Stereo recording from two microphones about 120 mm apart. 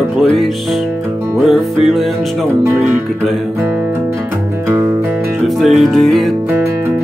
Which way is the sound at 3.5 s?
15° right (ahead or behind).